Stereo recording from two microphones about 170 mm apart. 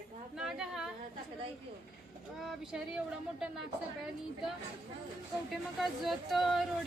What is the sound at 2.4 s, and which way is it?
Speech, 5° right (ahead or behind).